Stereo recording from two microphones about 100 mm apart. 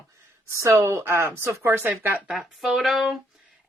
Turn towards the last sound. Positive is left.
turn(degrees=0)  # may be behind; listen again after turning